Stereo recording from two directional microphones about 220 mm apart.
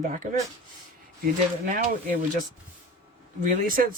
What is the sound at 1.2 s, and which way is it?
Speech, 40° right (ahead or behind).